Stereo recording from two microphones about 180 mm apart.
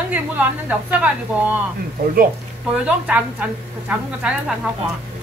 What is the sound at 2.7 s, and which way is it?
A woman's voice, 5° right (ahead or behind).